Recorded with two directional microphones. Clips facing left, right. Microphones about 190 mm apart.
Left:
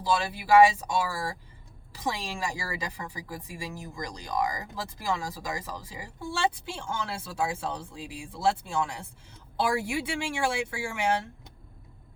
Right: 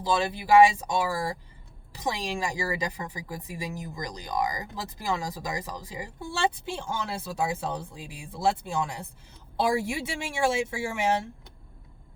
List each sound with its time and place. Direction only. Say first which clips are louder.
0.0 s speech: right 1 dB; 20° right (ahead or behind)